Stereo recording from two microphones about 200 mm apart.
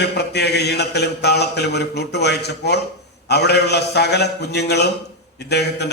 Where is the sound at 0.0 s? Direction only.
55° left (ahead or behind).